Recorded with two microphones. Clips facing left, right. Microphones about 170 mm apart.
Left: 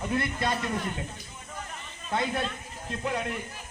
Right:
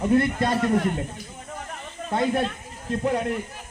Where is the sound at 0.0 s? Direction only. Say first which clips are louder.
Right 8 dB; 40° right (ahead or behind); by 0.9 s 55° right (ahead or behind).